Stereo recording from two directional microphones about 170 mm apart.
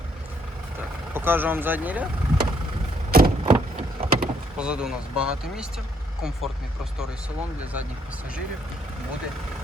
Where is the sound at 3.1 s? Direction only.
65° right (ahead or behind).